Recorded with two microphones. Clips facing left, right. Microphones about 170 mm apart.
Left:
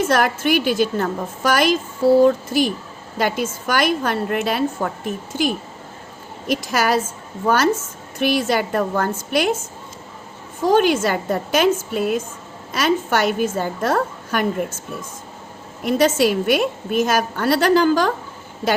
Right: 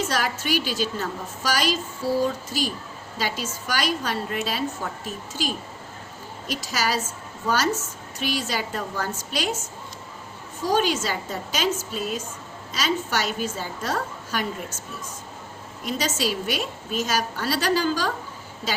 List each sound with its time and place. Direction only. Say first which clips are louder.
0.0 s a woman's voice: left 8 dB; 55° left (ahead or behind)
10.6 s a woman's voice: left 7 dB; 55° left (ahead or behind)
15.8 s a woman's voice: left 10 dB; 55° left (ahead or behind)